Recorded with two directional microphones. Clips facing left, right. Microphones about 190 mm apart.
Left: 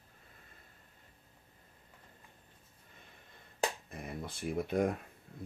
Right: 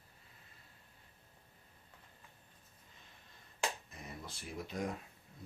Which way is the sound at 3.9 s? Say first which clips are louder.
Left 7 dB; 55° left (ahead or behind).